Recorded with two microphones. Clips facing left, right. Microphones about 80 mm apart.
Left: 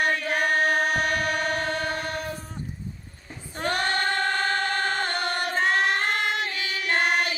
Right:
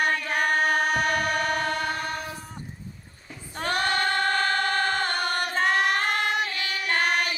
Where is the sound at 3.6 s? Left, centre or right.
Left.